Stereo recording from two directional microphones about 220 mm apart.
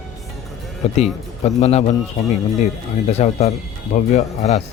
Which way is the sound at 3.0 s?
30° left (ahead or behind).